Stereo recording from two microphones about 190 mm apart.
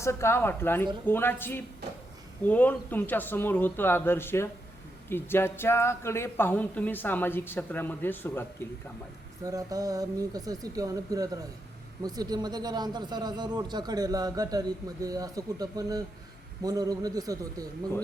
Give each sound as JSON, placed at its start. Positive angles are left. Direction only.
{"t": 0.0, "sound": "speech", "side_deg": 15}
{"t": 9.4, "sound": "a man's voice", "side_deg": -20}